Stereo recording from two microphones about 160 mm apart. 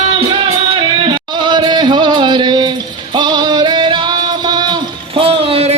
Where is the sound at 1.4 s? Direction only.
30° right (ahead or behind).